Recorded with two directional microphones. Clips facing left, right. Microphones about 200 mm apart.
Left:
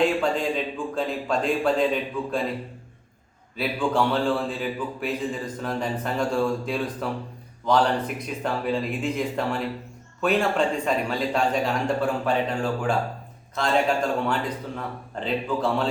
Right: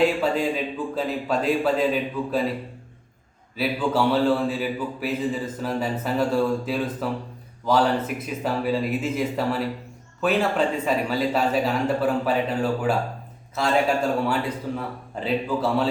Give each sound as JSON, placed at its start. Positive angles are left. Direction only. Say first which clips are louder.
{"t": 0.0, "sound": "a man's voice", "louder": "right 1 dB", "side_deg": -5}
{"t": 3.6, "sound": "a man's voice", "louder": "right 1 dB", "side_deg": -5}